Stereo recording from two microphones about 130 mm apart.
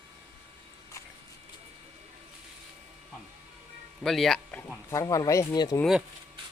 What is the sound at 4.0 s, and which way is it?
Speech, centre (ahead or behind).